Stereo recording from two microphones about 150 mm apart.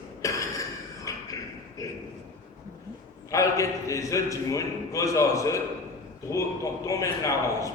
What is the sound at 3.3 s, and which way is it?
A man's voice, 20° left (ahead or behind).